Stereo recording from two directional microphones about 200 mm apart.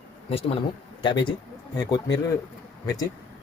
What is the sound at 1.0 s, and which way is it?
Speech, 25° left (ahead or behind).